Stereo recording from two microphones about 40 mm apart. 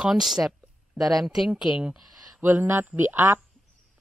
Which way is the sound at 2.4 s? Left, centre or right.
Right.